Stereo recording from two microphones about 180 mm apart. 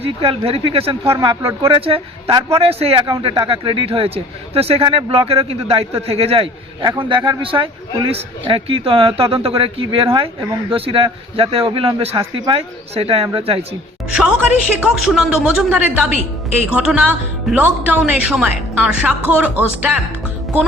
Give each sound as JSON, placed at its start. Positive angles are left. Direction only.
{"t": 0.0, "sound": "a man's voice", "side_deg": -30}
{"t": 14.2, "sound": "speech", "side_deg": -5}